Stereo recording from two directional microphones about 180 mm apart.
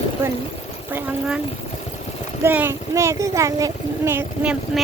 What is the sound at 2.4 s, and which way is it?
A child's voice, 15° right (ahead or behind).